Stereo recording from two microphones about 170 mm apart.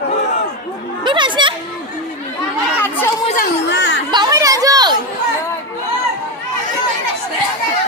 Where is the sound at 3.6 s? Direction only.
85° left.